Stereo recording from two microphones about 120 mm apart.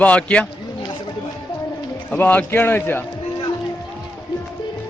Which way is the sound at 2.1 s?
15° left (ahead or behind).